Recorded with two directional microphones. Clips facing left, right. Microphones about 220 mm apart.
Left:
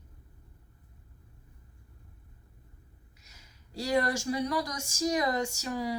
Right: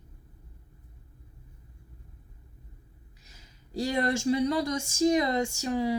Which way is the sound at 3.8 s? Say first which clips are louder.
Right 2 dB; 25° right (ahead or behind).